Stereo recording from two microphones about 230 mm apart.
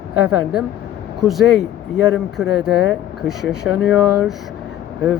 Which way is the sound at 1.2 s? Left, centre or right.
Centre.